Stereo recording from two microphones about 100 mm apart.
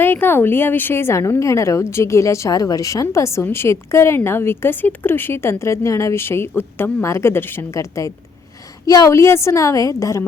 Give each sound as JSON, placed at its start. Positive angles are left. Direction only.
{"t": 0.0, "sound": "a woman's voice", "side_deg": 20}